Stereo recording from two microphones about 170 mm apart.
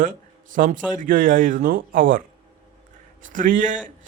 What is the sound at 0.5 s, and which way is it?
A man's voice, 50° right (ahead or behind).